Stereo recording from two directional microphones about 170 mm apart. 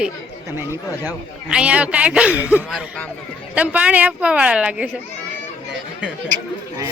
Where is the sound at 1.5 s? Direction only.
5° right (ahead or behind).